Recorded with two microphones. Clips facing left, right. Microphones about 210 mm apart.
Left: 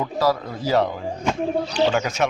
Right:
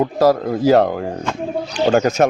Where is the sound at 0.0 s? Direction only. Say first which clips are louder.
Right 7 dB; 50° right (ahead or behind).